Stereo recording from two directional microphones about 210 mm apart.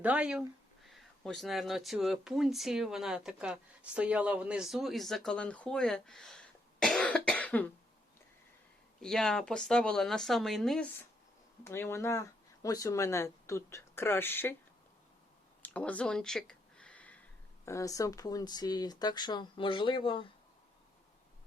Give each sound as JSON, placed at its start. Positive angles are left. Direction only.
{"t": 0.0, "sound": "speech", "side_deg": -5}
{"t": 9.0, "sound": "speech", "side_deg": 0}
{"t": 15.6, "sound": "a sound", "side_deg": 5}
{"t": 17.7, "sound": "speech", "side_deg": 15}